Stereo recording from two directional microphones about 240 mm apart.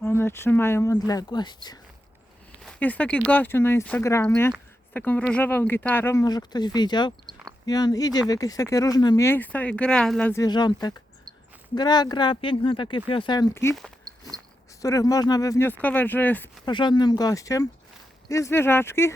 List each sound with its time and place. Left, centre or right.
0.0 s speech: centre
2.6 s speech: centre
14.1 s a sound: centre
14.8 s speech: centre
16.6 s speech: centre